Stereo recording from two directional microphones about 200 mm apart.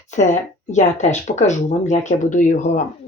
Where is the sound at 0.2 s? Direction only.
40° left (ahead or behind).